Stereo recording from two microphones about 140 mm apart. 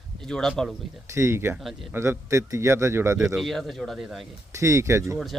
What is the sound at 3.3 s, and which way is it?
Speech, centre (ahead or behind).